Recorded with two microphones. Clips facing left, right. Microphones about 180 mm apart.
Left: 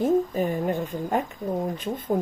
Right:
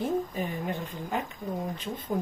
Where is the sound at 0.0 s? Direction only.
45° left (ahead or behind).